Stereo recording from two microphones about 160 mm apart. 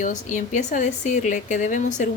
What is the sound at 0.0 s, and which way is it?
A woman's voice, 50° left (ahead or behind).